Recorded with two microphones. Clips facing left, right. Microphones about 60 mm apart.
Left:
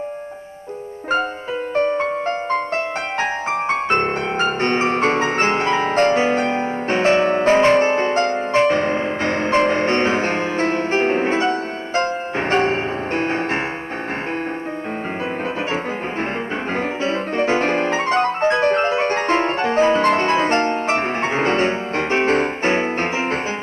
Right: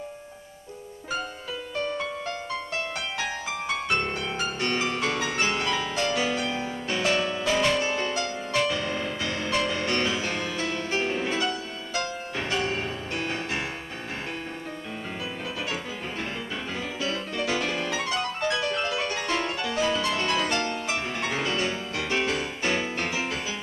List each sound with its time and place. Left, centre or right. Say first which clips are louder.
1.8 s music: left 11 dB; left
16.7 s music: left 9 dB; left